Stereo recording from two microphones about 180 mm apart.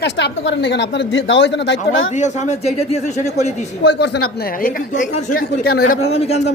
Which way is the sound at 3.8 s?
70° left (ahead or behind).